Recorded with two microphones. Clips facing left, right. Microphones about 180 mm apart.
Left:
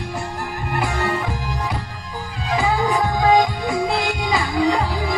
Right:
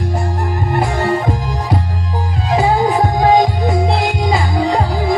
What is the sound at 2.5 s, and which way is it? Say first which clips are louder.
Music: right 5 dB; 35° right (ahead or behind).